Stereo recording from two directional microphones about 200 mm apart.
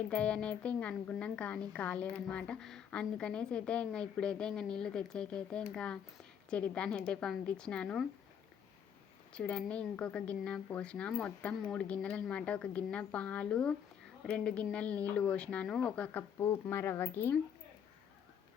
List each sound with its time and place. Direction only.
0.1 s a woman's voice: 5° left (ahead or behind)
9.3 s a woman's voice: 5° left (ahead or behind)